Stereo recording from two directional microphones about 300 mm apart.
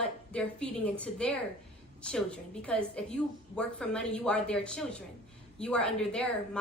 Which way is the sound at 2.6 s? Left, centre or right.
Centre.